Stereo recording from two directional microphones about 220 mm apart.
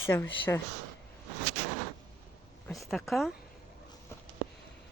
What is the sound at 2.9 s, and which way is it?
Speech, centre (ahead or behind).